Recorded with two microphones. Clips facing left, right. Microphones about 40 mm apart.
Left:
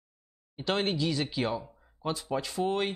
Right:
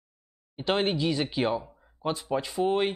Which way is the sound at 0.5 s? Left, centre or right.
Centre.